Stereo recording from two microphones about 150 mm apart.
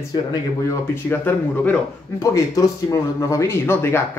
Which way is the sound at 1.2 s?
10° left (ahead or behind).